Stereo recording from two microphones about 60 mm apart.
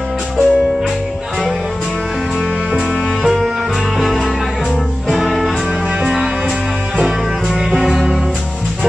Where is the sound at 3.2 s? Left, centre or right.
Centre.